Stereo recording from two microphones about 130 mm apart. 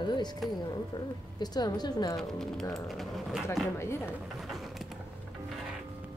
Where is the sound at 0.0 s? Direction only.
35° left (ahead or behind).